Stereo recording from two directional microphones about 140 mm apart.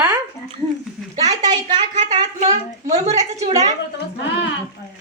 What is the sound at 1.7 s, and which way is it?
A woman's voice, 60° right (ahead or behind).